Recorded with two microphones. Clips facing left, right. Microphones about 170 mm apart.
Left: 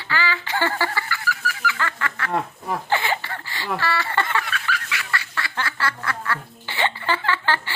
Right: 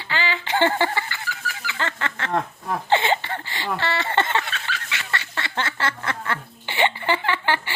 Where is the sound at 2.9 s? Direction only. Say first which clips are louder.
Right 5 dB; 25° right (ahead or behind).